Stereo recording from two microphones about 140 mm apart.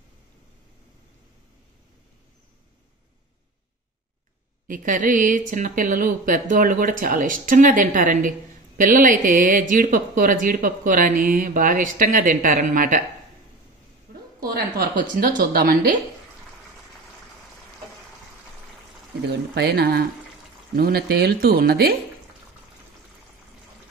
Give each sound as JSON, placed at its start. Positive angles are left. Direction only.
{"t": 4.6, "sound": "speech", "side_deg": -70}
{"t": 14.4, "sound": "a woman's voice", "side_deg": -90}
{"t": 19.7, "sound": "a woman's voice", "side_deg": -90}